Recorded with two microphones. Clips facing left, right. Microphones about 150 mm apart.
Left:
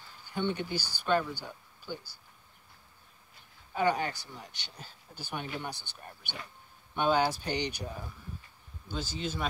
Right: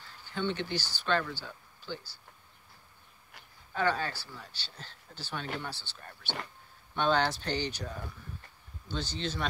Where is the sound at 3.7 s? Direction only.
15° left (ahead or behind).